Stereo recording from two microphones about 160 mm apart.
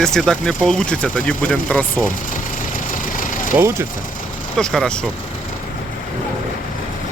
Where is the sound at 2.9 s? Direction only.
55° left (ahead or behind).